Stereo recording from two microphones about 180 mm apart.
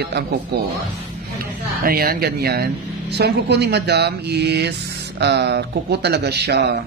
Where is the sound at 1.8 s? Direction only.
55° right (ahead or behind).